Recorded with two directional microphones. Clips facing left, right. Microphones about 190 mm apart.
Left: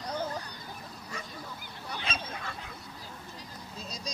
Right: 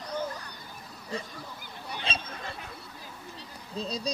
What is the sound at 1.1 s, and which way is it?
Speech, 30° right (ahead or behind).